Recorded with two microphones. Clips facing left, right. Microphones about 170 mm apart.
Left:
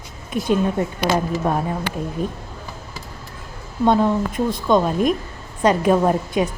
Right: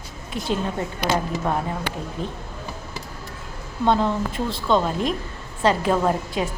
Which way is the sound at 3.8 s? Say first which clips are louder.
Left 4 dB; 15° left (ahead or behind).